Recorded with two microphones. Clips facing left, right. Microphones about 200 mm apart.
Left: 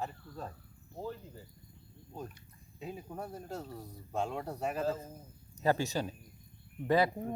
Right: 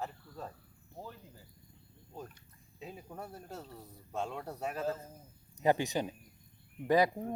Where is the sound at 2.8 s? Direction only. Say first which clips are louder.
Left 4 dB; centre (ahead or behind).